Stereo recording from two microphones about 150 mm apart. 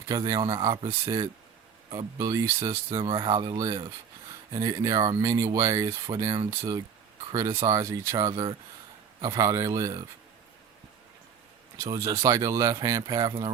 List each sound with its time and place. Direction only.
0.2 s speech: 30° right (ahead or behind)
0.8 s speech: 40° right (ahead or behind)
1.9 s speech: 25° right (ahead or behind)
3.0 s speech: 35° right (ahead or behind)
11.8 s speech: 20° right (ahead or behind)